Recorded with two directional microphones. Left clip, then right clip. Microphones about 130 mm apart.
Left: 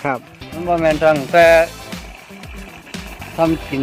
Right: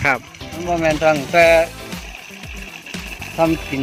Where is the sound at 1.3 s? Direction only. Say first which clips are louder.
Left 2 dB; 30° right (ahead or behind).